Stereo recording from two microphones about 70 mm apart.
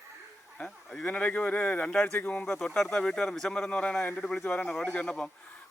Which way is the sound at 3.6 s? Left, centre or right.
Centre.